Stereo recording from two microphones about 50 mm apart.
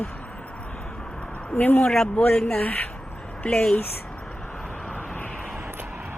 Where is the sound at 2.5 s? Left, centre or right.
Left.